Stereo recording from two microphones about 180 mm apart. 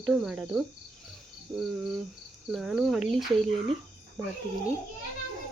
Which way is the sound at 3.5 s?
30° right (ahead or behind).